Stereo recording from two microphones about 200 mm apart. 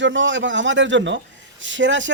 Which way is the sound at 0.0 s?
65° right (ahead or behind).